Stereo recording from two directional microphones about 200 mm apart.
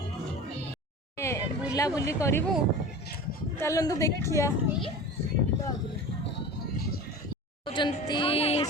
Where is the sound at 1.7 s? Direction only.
15° left (ahead or behind).